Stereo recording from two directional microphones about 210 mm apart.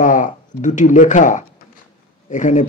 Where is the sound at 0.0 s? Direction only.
40° left (ahead or behind).